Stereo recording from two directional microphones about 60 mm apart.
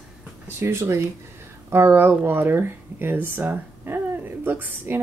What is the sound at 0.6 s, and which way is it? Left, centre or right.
Speech, right.